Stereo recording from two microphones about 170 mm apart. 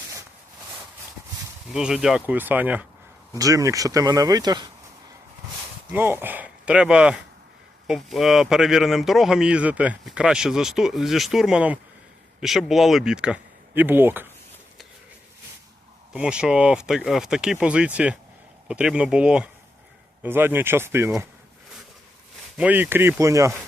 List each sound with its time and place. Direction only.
1.7 s speech: 5° right (ahead or behind)
3.3 s speech: 20° right (ahead or behind)
5.9 s speech: 10° right (ahead or behind)
16.1 s speech: 5° right (ahead or behind)
22.5 s speech: 10° right (ahead or behind)